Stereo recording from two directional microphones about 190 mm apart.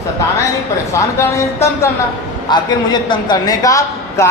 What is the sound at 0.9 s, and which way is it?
A man's voice, 15° left (ahead or behind).